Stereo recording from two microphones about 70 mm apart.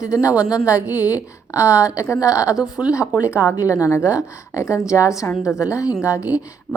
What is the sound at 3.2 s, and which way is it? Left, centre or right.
Speech, left.